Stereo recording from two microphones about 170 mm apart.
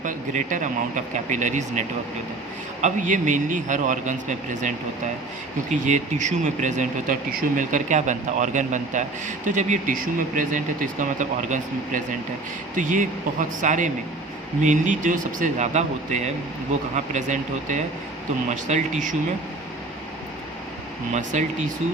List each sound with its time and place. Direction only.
0.0 s speech: 50° right (ahead or behind)
2.8 s speech: 50° right (ahead or behind)
5.8 s speech: 45° right (ahead or behind)
21.1 s speech: 45° right (ahead or behind)